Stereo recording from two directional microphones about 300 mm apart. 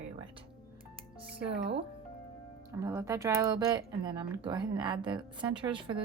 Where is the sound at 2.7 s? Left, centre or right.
Centre.